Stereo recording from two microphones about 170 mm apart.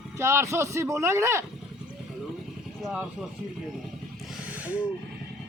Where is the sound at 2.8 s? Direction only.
5° right (ahead or behind).